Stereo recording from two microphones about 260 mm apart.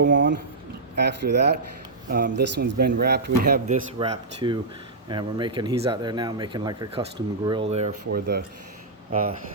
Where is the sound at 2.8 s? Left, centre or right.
Right.